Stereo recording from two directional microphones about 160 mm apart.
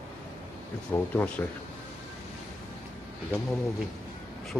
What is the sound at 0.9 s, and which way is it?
Speech, 10° left (ahead or behind).